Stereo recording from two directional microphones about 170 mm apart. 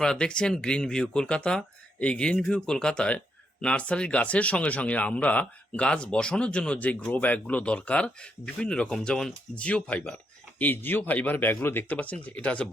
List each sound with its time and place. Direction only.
0.0 s speech: 5° left (ahead or behind)